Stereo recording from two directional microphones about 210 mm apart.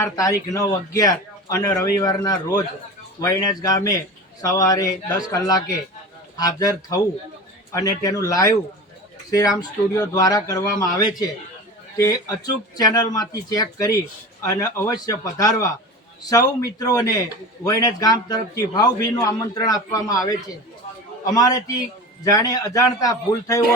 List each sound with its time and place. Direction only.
0.0 s a man's voice: 15° left (ahead or behind)